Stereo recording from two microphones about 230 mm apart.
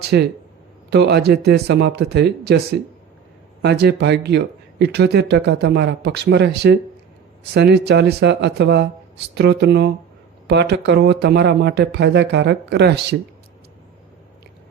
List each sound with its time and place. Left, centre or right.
0.1 s speech: right